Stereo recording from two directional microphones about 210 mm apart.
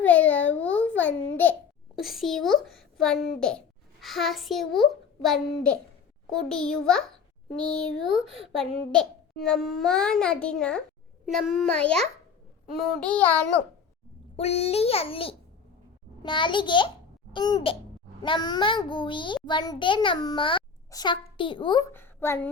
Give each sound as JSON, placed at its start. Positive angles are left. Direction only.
{"t": 0.0, "sound": "babbling", "side_deg": 5}
{"t": 1.4, "sound": "a child's voice", "side_deg": 10}
{"t": 12.7, "sound": "child singing", "side_deg": 0}
{"t": 14.3, "sound": "a child's voice", "side_deg": 30}
{"t": 21.9, "sound": "a woman's voice", "side_deg": 10}